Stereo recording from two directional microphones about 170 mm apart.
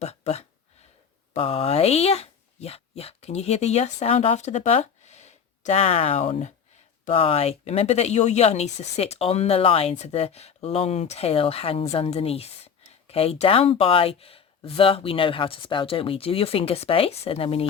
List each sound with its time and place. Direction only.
0.0 s speech: 40° left (ahead or behind)